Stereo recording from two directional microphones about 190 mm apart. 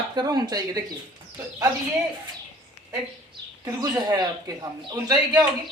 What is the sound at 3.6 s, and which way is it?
Speech, 20° right (ahead or behind).